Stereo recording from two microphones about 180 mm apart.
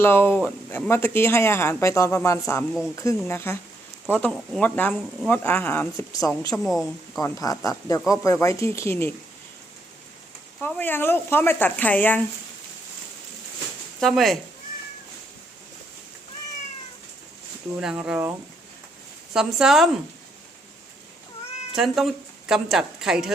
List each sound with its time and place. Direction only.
0.0 s speech: 10° left (ahead or behind)
10.6 s speech: 10° left (ahead or behind)
14.0 s a woman's voice: centre (ahead or behind)
17.7 s a woman's voice: 5° right (ahead or behind)
21.8 s a woman's voice: centre (ahead or behind)